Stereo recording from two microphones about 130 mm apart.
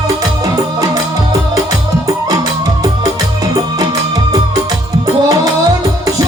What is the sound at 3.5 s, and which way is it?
Music, 30° right (ahead or behind).